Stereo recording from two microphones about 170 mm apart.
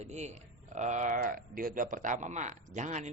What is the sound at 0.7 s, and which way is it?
A man's voice, 45° right (ahead or behind).